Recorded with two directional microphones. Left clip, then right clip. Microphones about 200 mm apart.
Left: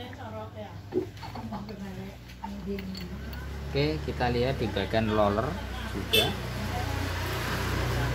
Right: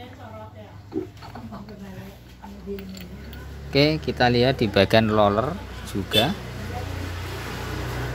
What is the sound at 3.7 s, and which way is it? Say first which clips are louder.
Speech: right 9 dB; 55° right (ahead or behind).